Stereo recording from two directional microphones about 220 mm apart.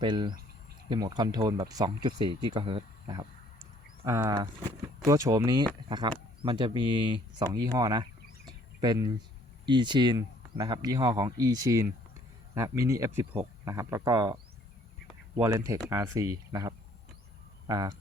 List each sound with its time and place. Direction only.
0.0 s speech: 20° right (ahead or behind)
2.5 s a sound: 25° right (ahead or behind)
5.0 s speech: 15° right (ahead or behind)
8.4 s a sound: 20° right (ahead or behind)
9.6 s speech: 20° right (ahead or behind)
15.4 s speech: 10° right (ahead or behind)